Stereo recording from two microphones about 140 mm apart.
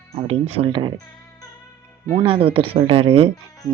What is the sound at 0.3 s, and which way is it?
Speech, 45° right (ahead or behind).